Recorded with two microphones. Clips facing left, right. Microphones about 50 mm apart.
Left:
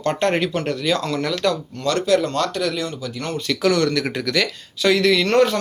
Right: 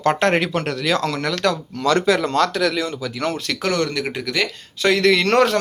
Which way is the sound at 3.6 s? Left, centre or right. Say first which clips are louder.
Left 3 dB; right.